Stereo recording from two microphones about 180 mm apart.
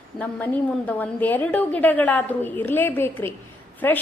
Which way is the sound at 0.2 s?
10° left (ahead or behind).